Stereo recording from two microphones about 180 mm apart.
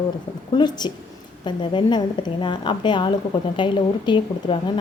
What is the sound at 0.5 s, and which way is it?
A woman's voice, 25° left (ahead or behind).